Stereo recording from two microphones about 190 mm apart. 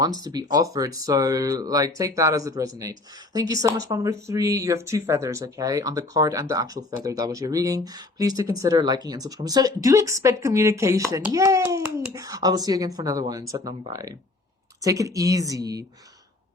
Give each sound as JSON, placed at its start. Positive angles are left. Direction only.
{"t": 0.2, "sound": "speech", "side_deg": -20}